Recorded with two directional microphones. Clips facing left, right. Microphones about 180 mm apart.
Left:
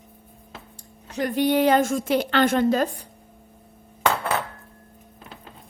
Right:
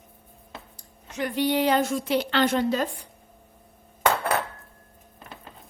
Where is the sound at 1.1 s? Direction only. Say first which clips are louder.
Left 3 dB; 45° left (ahead or behind).